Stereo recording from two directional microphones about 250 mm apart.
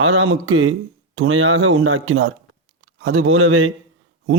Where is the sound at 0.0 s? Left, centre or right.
Right.